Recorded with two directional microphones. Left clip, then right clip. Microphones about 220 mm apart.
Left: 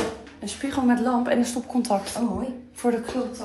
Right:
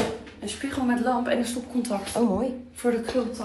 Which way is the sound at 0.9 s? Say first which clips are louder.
Left 1 dB; 45° left (ahead or behind).